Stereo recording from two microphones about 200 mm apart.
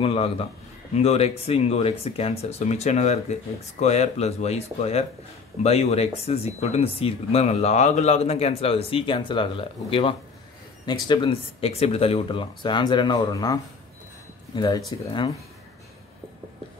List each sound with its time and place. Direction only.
0.0 s speech: 30° left (ahead or behind)